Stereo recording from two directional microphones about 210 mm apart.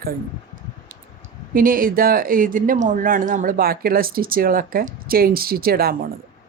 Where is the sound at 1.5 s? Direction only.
40° right (ahead or behind).